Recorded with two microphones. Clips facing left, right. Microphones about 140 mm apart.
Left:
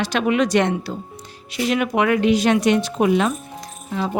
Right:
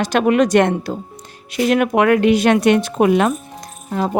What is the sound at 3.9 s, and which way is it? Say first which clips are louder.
Speech: right 4 dB; 45° right (ahead or behind).